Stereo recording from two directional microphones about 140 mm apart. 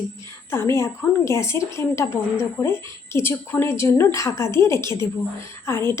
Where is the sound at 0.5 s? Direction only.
20° left (ahead or behind).